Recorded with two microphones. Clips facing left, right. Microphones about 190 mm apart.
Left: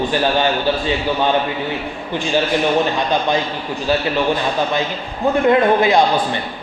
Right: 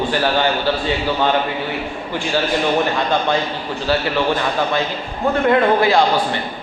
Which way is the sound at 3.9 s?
20° left (ahead or behind).